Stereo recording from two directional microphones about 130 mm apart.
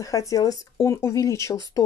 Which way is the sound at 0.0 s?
25° left (ahead or behind).